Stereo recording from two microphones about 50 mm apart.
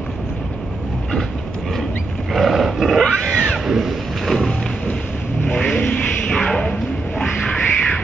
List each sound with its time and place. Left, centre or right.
2.3 s roaring cats: centre
3.0 s roaring cats: centre
3.6 s boat: centre
5.4 s vehicle: left
6.2 s a sound: centre
7.2 s music: centre